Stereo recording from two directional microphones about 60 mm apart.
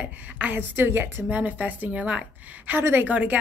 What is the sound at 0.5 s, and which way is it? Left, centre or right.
Speech, right.